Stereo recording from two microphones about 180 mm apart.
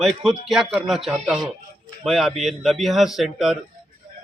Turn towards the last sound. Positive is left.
turn(degrees=0)  # may be behind; listen again after turning